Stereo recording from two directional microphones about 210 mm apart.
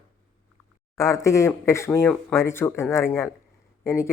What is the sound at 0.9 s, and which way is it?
Speech, 15° left (ahead or behind).